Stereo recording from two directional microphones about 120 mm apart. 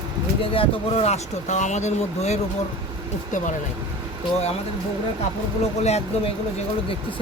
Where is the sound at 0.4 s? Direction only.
50° left (ahead or behind); by 2.4 s 70° left (ahead or behind).